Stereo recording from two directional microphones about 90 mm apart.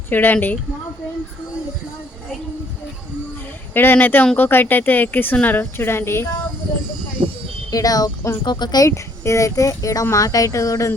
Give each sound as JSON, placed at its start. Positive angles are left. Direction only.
{"t": 0.1, "sound": "speech", "side_deg": 20}
{"t": 3.8, "sound": "speech", "side_deg": 25}
{"t": 7.7, "sound": "speech", "side_deg": 40}
{"t": 8.9, "sound": "speech", "side_deg": 35}